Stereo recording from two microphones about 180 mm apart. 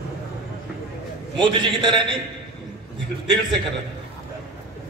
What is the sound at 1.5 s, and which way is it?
Speech, 25° right (ahead or behind).